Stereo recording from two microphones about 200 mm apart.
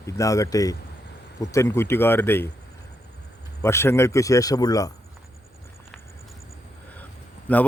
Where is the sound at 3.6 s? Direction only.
15° left (ahead or behind).